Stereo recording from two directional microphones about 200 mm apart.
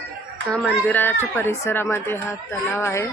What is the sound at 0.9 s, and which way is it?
Speech, 10° left (ahead or behind).